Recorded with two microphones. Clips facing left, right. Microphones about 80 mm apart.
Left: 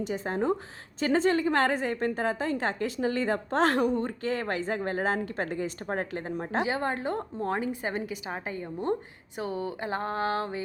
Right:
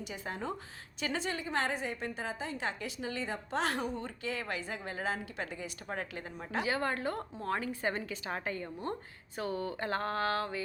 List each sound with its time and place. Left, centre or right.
0.0 s a woman's voice: left